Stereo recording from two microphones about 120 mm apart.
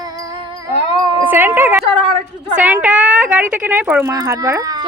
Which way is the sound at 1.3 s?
20° right (ahead or behind).